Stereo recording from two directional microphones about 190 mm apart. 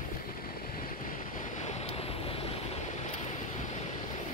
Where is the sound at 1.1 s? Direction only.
40° left (ahead or behind).